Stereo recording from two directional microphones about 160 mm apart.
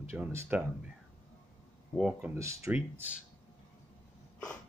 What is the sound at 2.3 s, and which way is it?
Speech, 20° right (ahead or behind).